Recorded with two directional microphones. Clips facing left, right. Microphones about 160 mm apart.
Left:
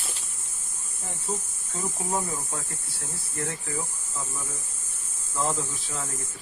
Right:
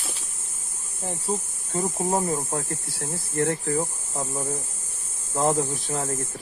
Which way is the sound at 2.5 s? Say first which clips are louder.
Right 8 dB; 60° right (ahead or behind).